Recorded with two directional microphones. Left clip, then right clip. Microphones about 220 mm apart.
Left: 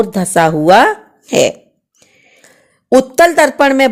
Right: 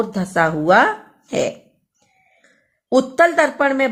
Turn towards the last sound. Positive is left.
turn(degrees=40)  # may be behind; listen again after turning